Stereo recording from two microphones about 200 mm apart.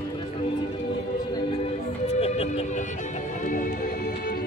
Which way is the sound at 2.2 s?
30° left (ahead or behind).